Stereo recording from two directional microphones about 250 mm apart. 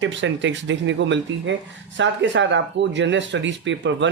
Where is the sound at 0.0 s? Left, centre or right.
Right.